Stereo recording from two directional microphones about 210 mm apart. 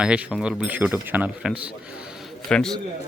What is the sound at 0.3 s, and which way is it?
A man's voice, 5° right (ahead or behind).